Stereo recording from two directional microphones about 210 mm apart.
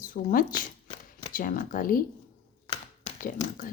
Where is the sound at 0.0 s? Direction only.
40° left (ahead or behind).